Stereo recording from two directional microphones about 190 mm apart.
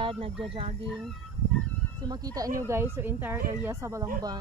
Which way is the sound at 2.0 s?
20° right (ahead or behind).